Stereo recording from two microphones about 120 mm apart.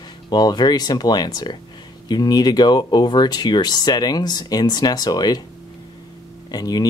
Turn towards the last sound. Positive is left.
turn(degrees=35)  # may be behind; listen again after turning